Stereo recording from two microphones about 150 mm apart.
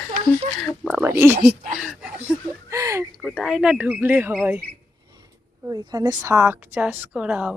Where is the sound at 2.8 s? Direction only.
20° right (ahead or behind).